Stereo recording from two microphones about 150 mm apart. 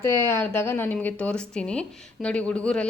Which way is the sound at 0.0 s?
15° left (ahead or behind).